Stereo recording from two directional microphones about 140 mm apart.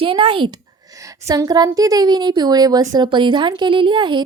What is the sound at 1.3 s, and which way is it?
Speech, 25° right (ahead or behind).